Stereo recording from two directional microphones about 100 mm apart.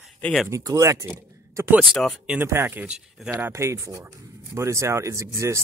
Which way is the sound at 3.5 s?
30° right (ahead or behind).